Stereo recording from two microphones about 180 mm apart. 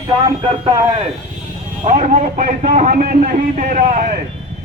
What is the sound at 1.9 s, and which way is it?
A man's voice, 45° right (ahead or behind).